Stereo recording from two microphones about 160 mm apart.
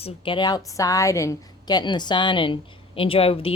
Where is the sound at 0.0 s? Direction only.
30° left (ahead or behind).